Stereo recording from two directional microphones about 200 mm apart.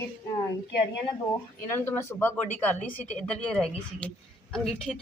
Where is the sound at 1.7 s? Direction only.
10° left (ahead or behind).